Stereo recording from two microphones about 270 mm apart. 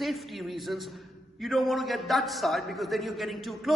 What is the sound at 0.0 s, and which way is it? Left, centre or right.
A man's voice, centre.